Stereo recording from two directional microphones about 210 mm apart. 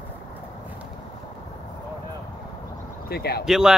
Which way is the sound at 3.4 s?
Centre (ahead or behind).